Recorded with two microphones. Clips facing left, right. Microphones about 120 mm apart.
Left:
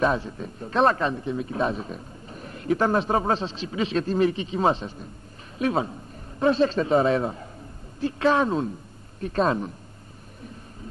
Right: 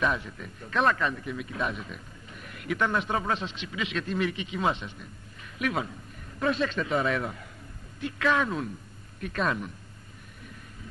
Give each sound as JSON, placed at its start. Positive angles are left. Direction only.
{"t": 0.0, "sound": "speech", "side_deg": 30}